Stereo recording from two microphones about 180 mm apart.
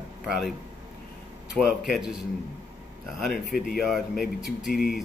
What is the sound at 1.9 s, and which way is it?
Speech, centre (ahead or behind).